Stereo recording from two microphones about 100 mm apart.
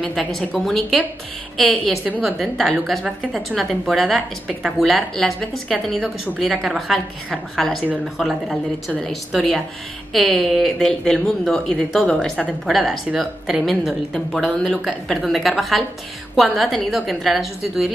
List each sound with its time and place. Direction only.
0.0 s a woman's voice: centre (ahead or behind)